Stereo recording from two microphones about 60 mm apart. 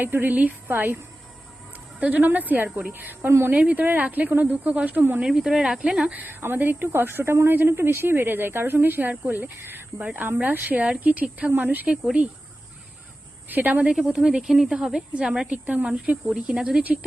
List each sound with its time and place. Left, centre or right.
0.0 s speech: right
0.3 s speech: right
2.0 s speech: right
3.5 s speech: centre
5.2 s speech: centre
6.1 s speech: right
6.4 s speech: right
13.5 s speech: right
13.8 s speech: centre